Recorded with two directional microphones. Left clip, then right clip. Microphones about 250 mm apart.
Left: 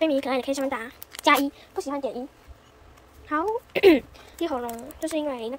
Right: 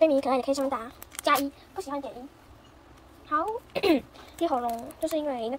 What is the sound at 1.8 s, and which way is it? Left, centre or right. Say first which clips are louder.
Speech: left 5 dB; left.